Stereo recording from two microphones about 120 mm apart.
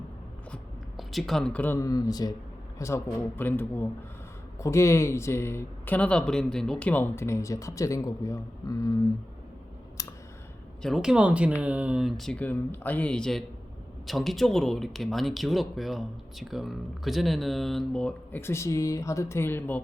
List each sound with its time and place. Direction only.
0.9 s speech: centre (ahead or behind)
1.8 s speech: 30° left (ahead or behind)
10.0 s clicking: 30° left (ahead or behind)
10.8 s speech: 5° right (ahead or behind)
12.4 s speech: 15° left (ahead or behind)
18.3 s speech: 20° left (ahead or behind)